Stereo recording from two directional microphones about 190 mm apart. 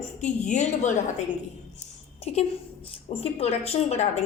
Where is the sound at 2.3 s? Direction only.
35° left (ahead or behind).